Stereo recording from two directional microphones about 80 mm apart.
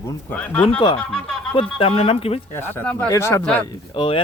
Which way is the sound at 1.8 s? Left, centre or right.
Left.